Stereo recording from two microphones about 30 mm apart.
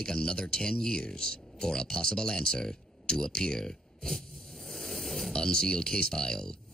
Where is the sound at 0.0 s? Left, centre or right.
Left.